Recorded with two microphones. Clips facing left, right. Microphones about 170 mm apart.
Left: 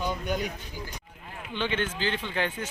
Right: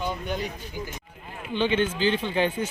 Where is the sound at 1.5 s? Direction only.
15° right (ahead or behind).